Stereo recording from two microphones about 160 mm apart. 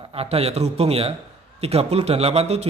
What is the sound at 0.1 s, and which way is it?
A man's voice, 40° right (ahead or behind).